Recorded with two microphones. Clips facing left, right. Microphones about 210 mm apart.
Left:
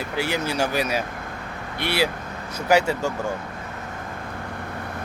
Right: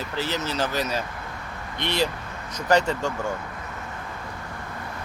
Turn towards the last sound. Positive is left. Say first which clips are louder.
# left 2 dB
turn(degrees=10)  # may be behind; listen again after turning